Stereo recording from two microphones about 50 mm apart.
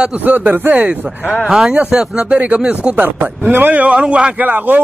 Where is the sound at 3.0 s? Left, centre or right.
Right.